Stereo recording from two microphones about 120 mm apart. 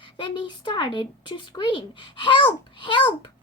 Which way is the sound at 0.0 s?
40° left (ahead or behind).